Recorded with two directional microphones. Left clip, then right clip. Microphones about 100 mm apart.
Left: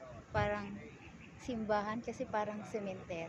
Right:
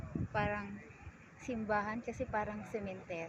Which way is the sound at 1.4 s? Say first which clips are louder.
Even; 35° right (ahead or behind).